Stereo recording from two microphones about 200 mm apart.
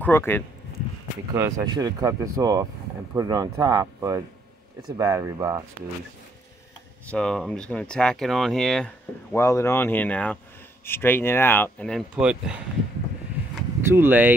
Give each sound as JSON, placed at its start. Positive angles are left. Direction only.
{"t": 0.0, "sound": "speech", "side_deg": 10}
{"t": 1.3, "sound": "speech", "side_deg": -15}
{"t": 7.1, "sound": "speech", "side_deg": 5}
{"t": 9.3, "sound": "speech", "side_deg": 15}
{"t": 12.2, "sound": "speech", "side_deg": -5}
{"t": 13.7, "sound": "speech", "side_deg": -10}